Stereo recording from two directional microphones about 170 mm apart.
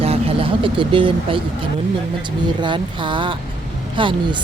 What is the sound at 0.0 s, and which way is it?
Speech, 35° right (ahead or behind).